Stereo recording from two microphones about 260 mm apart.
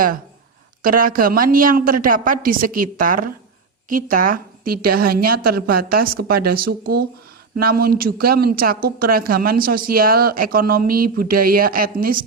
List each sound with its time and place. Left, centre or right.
0.8 s a woman's voice: right